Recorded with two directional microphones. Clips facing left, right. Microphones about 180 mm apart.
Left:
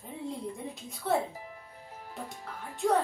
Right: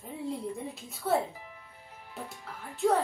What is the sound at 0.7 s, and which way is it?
Speech, centre (ahead or behind).